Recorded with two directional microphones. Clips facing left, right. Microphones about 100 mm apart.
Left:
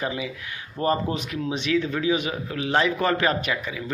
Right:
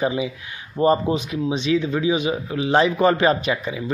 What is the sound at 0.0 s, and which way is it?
Speech, 25° right (ahead or behind).